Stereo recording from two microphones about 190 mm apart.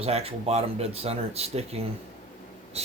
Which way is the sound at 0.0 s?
30° right (ahead or behind).